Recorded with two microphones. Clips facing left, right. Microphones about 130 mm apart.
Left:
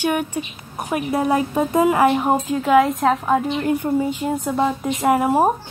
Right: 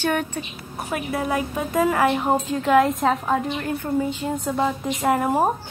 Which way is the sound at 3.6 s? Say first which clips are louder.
Left 4 dB; 20° left (ahead or behind).